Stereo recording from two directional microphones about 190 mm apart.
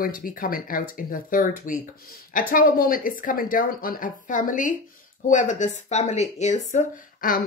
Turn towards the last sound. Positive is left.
turn(degrees=45)  # may be behind; listen again after turning